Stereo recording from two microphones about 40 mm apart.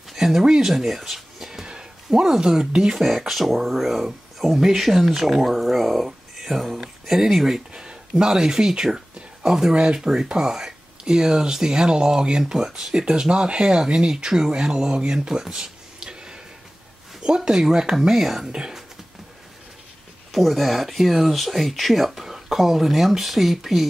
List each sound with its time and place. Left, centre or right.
0.1 s speech: centre
0.7 s speech: centre
3.0 s speech: centre
15.4 s a sound: centre
17.5 s speech: centre
18.5 s speech: centre
20.3 s speech: centre